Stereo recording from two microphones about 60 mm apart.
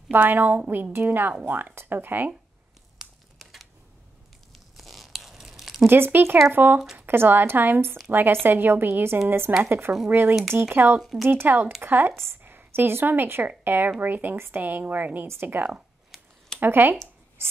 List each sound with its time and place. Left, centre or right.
0.1 s speech: right
3.0 s crumpling: centre
4.5 s a sound: centre
5.9 s speech: right
11.0 s speech: centre
11.2 s speech: right